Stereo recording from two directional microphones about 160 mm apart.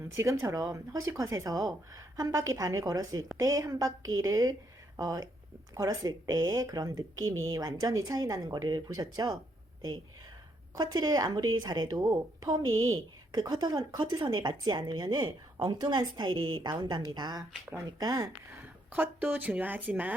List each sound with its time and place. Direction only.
0.2 s a woman's voice: 15° right (ahead or behind)
10.8 s a woman's voice: 25° right (ahead or behind)
18.6 s speech: 10° right (ahead or behind)